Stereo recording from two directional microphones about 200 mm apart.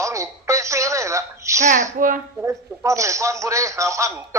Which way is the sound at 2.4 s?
15° right (ahead or behind).